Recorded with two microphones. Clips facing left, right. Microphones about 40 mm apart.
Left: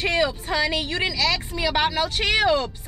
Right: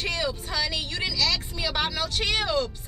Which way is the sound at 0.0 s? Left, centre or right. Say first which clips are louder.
Left 6 dB; left.